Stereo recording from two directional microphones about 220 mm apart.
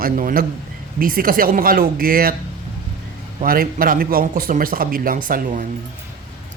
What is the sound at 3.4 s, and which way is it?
Speech, 40° right (ahead or behind).